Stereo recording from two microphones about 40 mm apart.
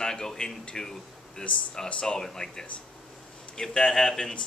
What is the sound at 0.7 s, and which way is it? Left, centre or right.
Speech, centre.